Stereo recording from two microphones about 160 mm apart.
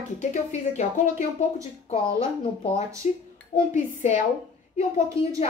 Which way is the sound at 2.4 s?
40° left (ahead or behind).